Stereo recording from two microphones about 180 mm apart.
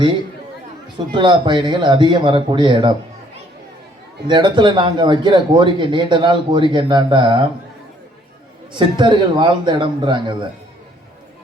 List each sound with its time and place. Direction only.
0.9 s speech: 25° right (ahead or behind)
4.3 s speech: 25° right (ahead or behind)
8.7 s speech: 25° right (ahead or behind)